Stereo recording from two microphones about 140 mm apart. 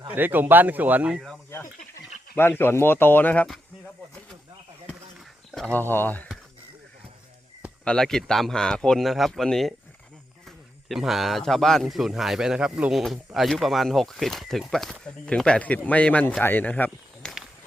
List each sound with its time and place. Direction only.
0.1 s speech: 15° right (ahead or behind)
1.5 s speech: 15° left (ahead or behind)
5.5 s a sound: centre (ahead or behind)
5.7 s speech: 15° left (ahead or behind)
7.9 s speech: 5° left (ahead or behind)
10.8 s speech: centre (ahead or behind)